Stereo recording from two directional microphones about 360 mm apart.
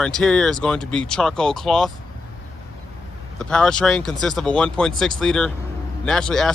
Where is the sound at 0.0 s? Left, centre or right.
Centre.